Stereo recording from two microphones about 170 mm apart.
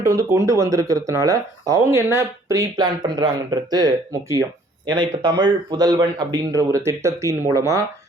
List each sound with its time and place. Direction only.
0.0 s speech: 15° right (ahead or behind)